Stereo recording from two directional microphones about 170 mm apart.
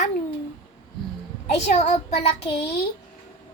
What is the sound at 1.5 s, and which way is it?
Speech, 40° left (ahead or behind).